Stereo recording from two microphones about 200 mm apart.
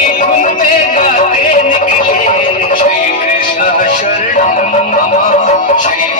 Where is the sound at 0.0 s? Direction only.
40° left (ahead or behind).